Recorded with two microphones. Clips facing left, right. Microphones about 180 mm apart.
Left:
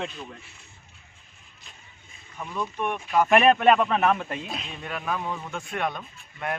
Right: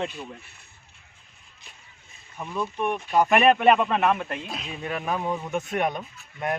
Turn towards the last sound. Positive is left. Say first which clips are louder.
# right 4 dB
turn(degrees=-15)  # may be behind; listen again after turning